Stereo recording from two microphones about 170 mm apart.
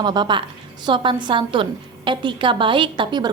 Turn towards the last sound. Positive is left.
turn(degrees=-25)  # may be behind; listen again after turning